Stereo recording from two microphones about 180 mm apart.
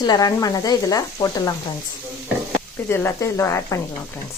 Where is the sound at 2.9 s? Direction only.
15° left (ahead or behind).